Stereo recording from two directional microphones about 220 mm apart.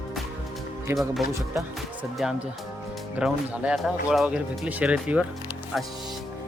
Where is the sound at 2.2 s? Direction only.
5° right (ahead or behind).